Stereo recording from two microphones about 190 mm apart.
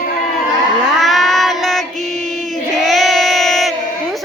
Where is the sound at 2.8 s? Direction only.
Centre (ahead or behind).